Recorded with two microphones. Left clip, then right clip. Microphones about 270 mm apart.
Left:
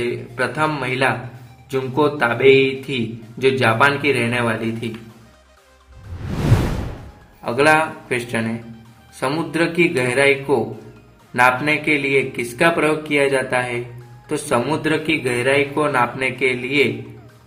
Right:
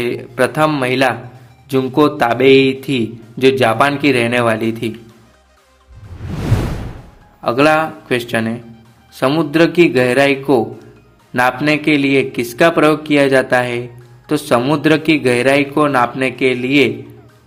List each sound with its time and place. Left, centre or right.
0.3 s a man's voice: right
6.1 s music: centre
7.4 s a man's voice: right